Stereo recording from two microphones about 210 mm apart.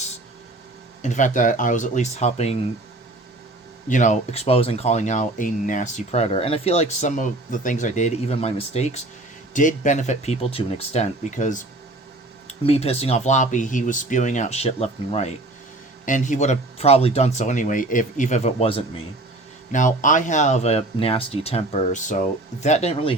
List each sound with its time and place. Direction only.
1.0 s speech: 35° left (ahead or behind)
3.8 s speech: 35° left (ahead or behind)